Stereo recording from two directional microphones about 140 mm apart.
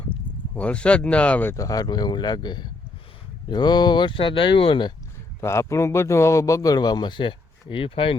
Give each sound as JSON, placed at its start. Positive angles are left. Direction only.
{"t": 0.1, "sound": "speech", "side_deg": 10}
{"t": 1.5, "sound": "speech", "side_deg": 25}
{"t": 5.4, "sound": "a man's voice", "side_deg": 20}